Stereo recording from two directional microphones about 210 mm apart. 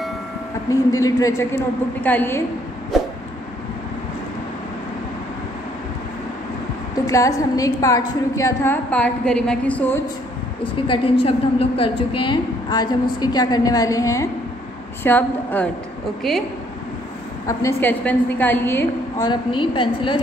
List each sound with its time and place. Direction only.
0.7 s a woman's voice: 15° left (ahead or behind)
7.1 s a woman's voice: 15° left (ahead or behind)
10.6 s a woman's voice: 25° left (ahead or behind); by 16.4 s centre (ahead or behind)
17.5 s a woman's voice: 15° left (ahead or behind)